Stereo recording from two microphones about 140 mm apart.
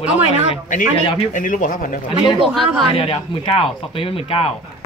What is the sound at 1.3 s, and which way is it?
Speech, 70° left (ahead or behind).